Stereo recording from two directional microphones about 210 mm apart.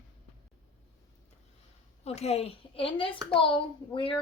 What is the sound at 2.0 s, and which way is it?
A woman's voice, 30° left (ahead or behind).